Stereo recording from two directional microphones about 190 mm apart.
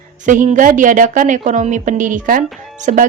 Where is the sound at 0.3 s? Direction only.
40° right (ahead or behind).